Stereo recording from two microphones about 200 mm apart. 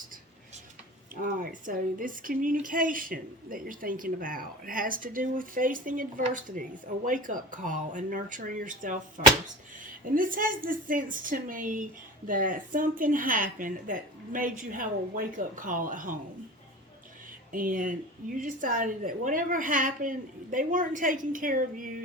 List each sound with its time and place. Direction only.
1.1 s speech: 45° right (ahead or behind)
17.5 s a woman's voice: 40° right (ahead or behind)